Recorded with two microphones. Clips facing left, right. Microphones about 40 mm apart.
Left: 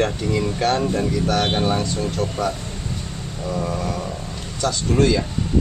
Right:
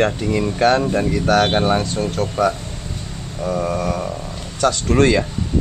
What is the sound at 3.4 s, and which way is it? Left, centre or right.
Speech, right.